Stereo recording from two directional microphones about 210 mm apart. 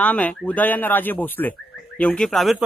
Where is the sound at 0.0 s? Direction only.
5° left (ahead or behind).